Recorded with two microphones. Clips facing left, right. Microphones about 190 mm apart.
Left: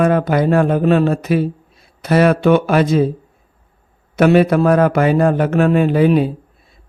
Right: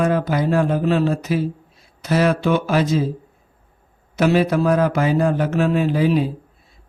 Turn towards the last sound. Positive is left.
turn(degrees=60)  # may be behind; listen again after turning